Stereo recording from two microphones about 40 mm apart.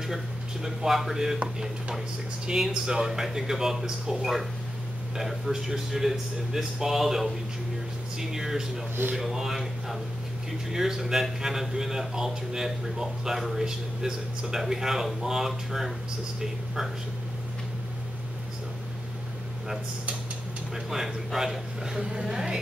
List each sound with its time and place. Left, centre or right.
0.7 s speech: centre
2.4 s speech: centre
13.7 s speech: centre
20.7 s speech: centre